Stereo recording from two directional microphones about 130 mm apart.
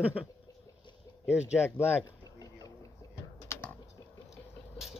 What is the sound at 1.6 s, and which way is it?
Speech, 15° left (ahead or behind).